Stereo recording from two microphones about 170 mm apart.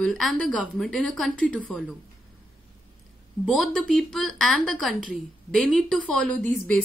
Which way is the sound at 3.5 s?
Centre (ahead or behind).